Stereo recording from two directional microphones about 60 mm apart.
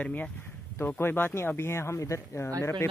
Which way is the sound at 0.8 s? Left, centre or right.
Left.